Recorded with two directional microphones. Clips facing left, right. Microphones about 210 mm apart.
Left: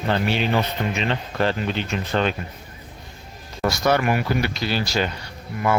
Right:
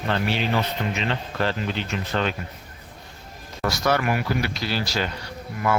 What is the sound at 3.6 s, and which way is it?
Speech, 20° left (ahead or behind).